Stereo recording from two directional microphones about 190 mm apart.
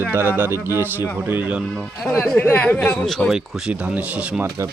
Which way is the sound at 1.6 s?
Centre (ahead or behind).